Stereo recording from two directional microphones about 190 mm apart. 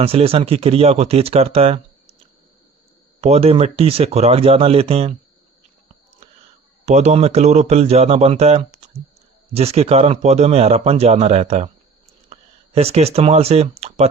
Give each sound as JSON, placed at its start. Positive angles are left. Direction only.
{"t": 0.0, "sound": "a man's voice", "side_deg": -30}
{"t": 3.2, "sound": "a man's voice", "side_deg": -35}
{"t": 6.8, "sound": "a man's voice", "side_deg": -35}